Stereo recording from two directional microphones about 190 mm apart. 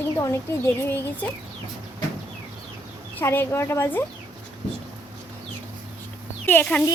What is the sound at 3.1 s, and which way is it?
Speech, 10° left (ahead or behind).